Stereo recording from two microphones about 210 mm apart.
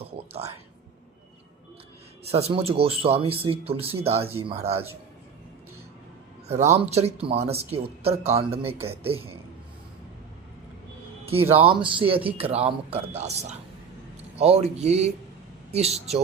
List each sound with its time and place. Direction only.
0.0 s a sound: 30° right (ahead or behind)
2.2 s speech: 30° right (ahead or behind)
6.5 s a man's voice: 30° right (ahead or behind)
11.6 s a man's voice: 25° right (ahead or behind)